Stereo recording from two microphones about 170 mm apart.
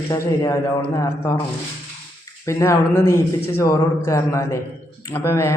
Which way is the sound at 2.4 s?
15° left (ahead or behind).